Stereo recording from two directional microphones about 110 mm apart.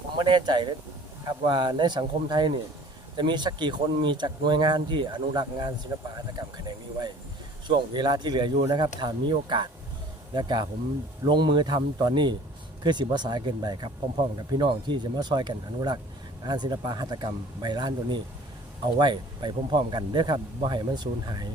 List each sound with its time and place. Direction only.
0.3 s speech: 40° right (ahead or behind)